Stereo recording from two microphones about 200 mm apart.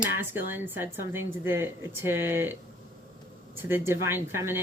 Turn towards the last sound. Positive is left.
turn(degrees=-10)  # may be behind; listen again after turning